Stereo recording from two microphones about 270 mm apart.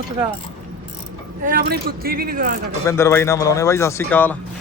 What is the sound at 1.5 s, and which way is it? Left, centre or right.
Speech, right.